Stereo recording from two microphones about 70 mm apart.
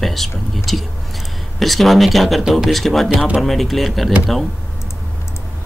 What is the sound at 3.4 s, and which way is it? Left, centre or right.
Speech, centre.